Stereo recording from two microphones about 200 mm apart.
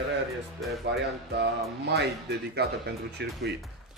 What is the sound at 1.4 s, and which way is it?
Speech, 55° right (ahead or behind).